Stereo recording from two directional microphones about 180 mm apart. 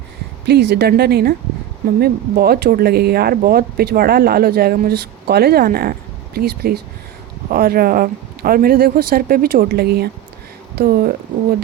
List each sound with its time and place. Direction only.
0.4 s speech: 65° right (ahead or behind)